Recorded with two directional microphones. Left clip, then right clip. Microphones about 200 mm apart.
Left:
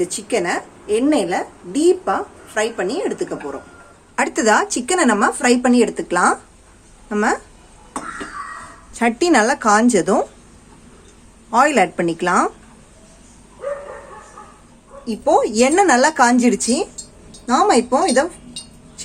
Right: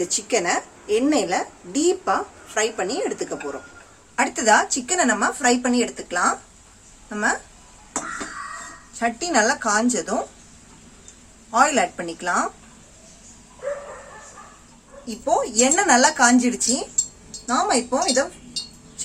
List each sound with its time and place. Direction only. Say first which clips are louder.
0.0 s a woman's voice: left 2 dB; centre (ahead or behind)
4.1 s speech: left 2 dB; 30° left (ahead or behind)
8.9 s a woman's voice: left 7 dB; 45° left (ahead or behind)
11.5 s speech: left 4 dB; 40° left (ahead or behind)
15.2 s a woman's voice: left 5 dB; 45° left (ahead or behind)